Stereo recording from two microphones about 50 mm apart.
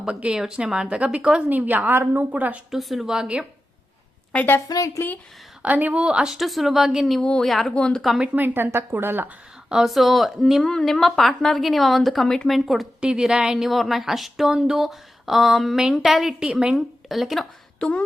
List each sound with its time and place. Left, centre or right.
0.0 s speech: right
1.5 s a woman's voice: right
2.6 s speech: centre
3.2 s speech: right
5.6 s a woman's voice: right
5.9 s speech: centre
7.0 s speech: centre
7.8 s speech: centre
8.4 s speech: right
9.8 s speech: centre
10.7 s speech: centre
13.0 s speech: centre
13.7 s a woman's voice: centre
17.7 s speech: left